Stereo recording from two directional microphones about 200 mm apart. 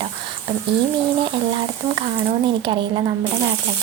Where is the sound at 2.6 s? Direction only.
25° right (ahead or behind).